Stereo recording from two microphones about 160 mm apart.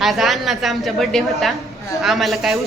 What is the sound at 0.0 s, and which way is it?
A woman's voice, centre (ahead or behind).